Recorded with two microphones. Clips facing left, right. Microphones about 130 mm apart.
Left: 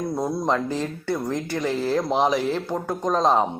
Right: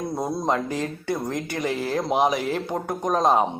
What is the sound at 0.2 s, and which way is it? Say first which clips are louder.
Speech: even; 20° right (ahead or behind).